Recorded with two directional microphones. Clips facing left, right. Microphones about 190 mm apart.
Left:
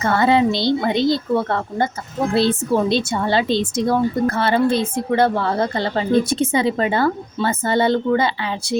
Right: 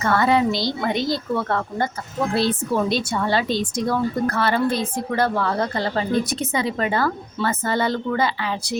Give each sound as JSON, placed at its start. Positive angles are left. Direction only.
{"t": 0.0, "sound": "a woman's voice", "side_deg": 25}